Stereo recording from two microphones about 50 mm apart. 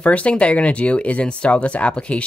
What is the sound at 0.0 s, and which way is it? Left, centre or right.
Speech, left.